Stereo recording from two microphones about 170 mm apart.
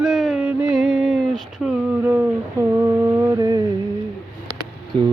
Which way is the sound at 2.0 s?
10° right (ahead or behind).